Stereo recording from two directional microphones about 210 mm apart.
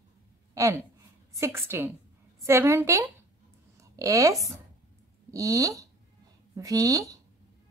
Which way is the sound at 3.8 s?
15° right (ahead or behind).